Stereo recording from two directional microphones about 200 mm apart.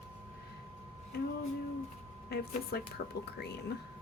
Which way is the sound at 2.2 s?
55° left (ahead or behind).